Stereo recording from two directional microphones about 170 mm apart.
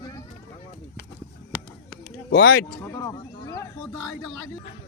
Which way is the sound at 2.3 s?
70° left (ahead or behind).